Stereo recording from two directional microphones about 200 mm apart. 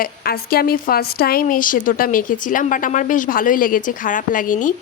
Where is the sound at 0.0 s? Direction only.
50° left (ahead or behind).